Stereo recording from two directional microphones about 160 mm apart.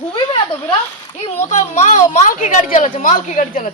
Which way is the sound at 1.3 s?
45° left (ahead or behind).